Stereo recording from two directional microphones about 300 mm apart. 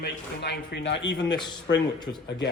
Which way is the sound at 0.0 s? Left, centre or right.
Left.